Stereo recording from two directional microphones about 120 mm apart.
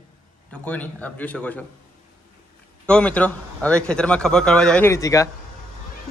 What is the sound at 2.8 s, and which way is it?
A man's voice, 10° left (ahead or behind).